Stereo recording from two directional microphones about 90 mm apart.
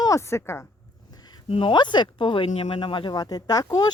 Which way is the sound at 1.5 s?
70° left (ahead or behind).